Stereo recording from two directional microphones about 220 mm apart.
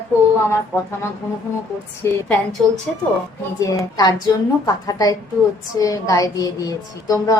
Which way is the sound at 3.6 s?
15° left (ahead or behind).